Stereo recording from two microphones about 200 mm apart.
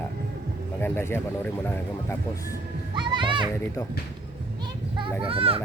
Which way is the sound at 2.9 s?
25° right (ahead or behind).